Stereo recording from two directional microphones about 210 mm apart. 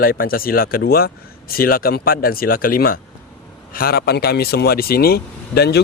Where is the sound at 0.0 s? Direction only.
45° left (ahead or behind).